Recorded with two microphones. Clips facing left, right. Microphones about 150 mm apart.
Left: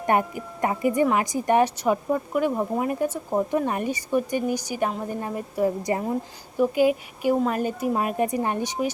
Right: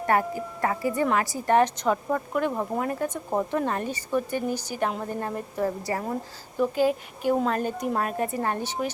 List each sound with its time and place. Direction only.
0.0 s speech: 20° left (ahead or behind)